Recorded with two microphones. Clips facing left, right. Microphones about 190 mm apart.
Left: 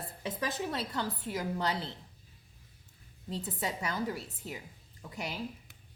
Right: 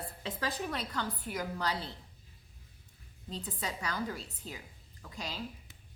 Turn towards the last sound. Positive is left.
turn(degrees=20)  # may be behind; listen again after turning